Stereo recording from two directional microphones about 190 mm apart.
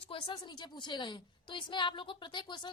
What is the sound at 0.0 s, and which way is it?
A woman's voice, 25° left (ahead or behind).